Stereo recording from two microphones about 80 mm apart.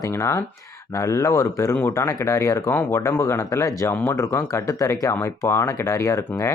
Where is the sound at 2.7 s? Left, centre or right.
Left.